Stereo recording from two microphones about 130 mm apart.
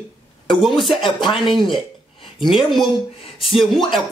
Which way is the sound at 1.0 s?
35° left (ahead or behind).